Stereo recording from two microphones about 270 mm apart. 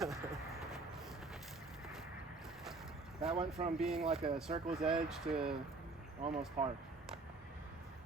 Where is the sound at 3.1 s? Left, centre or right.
Centre.